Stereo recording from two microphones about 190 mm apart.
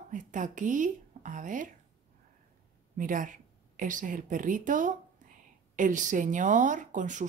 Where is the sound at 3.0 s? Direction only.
45° right (ahead or behind).